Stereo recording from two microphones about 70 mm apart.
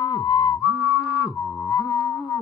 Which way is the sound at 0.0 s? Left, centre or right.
Left.